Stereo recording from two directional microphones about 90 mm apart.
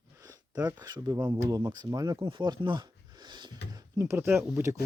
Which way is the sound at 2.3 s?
60° right (ahead or behind).